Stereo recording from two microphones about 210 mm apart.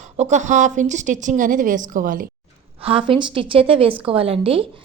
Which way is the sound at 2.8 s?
25° right (ahead or behind).